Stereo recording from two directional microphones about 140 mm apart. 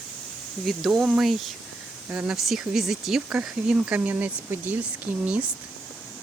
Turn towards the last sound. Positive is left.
turn(degrees=-10)  # may be behind; listen again after turning